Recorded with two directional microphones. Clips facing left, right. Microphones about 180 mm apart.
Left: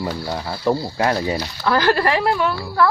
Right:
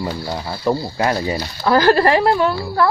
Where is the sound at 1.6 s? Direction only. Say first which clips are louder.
Right 5 dB; 40° right (ahead or behind).